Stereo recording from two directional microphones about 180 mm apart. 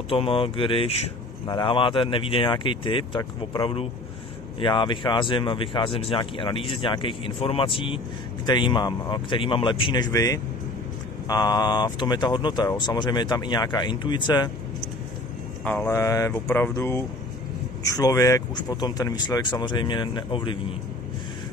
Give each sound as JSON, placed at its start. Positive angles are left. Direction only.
{"t": 0.1, "sound": "speech", "side_deg": 30}
{"t": 15.6, "sound": "speech", "side_deg": 10}